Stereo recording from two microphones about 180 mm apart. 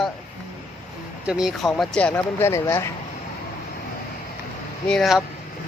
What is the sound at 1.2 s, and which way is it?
Speech, 5° right (ahead or behind).